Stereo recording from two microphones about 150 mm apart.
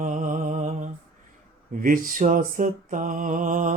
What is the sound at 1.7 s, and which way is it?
Mantra, 65° right (ahead or behind).